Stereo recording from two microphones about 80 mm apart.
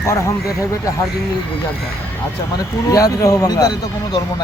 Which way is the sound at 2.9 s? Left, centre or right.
Left.